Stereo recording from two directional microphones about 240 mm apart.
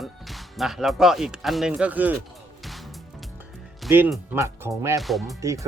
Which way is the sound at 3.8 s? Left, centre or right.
Centre.